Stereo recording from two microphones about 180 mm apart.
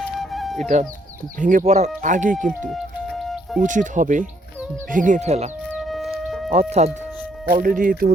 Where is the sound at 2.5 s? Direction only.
Centre (ahead or behind).